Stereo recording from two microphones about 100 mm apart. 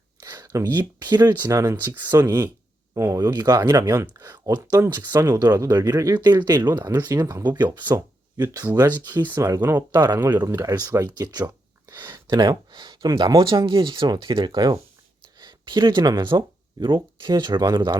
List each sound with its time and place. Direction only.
0.2 s speech: 40° right (ahead or behind)
1.5 s speech: 30° right (ahead or behind)
5.7 s speech: 30° right (ahead or behind)
6.2 s speech: 45° right (ahead or behind)
9.1 s speech: 20° right (ahead or behind)
9.4 s speech: 30° right (ahead or behind)
9.9 s speech: 45° right (ahead or behind)